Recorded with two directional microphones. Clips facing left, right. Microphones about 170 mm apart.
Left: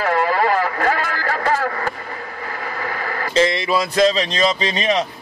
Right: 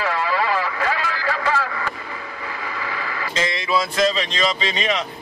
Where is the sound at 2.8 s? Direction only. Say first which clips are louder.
Left 4 dB; 45° left (ahead or behind).